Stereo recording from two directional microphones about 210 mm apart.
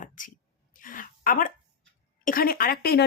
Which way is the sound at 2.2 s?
45° left (ahead or behind).